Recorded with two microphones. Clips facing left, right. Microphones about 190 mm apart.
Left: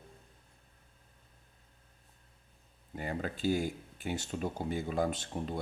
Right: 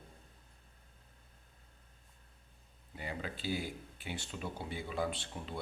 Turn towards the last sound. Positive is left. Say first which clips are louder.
# left 6 dB
turn(degrees=45)  # may be behind; listen again after turning